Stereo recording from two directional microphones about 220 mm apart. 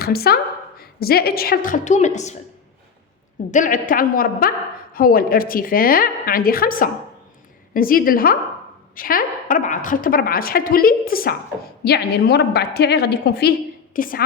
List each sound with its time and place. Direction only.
0.0 s a woman's voice: 45° left (ahead or behind)
3.5 s a woman's voice: 35° left (ahead or behind)